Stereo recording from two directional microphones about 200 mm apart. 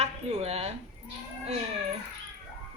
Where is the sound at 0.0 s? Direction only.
30° right (ahead or behind).